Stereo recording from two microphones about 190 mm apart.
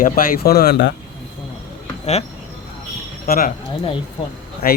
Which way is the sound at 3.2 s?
50° left (ahead or behind).